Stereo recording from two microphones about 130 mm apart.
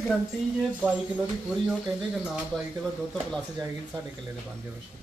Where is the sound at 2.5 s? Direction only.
5° left (ahead or behind).